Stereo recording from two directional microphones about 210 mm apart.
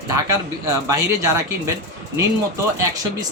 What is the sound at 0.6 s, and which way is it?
Speech, 15° right (ahead or behind).